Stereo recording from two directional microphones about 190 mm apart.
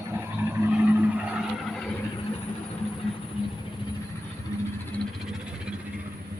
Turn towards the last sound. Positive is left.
turn(degrees=-5)  # may be behind; listen again after turning